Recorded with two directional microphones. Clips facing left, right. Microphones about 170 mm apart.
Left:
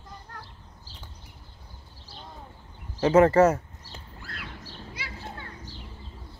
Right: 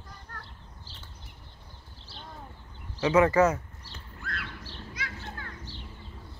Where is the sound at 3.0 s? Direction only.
50° left (ahead or behind).